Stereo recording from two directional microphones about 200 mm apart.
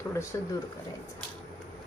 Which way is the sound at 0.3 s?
15° left (ahead or behind).